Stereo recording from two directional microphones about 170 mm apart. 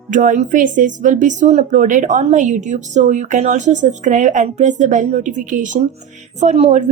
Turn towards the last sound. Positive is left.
turn(degrees=-40)  # may be behind; listen again after turning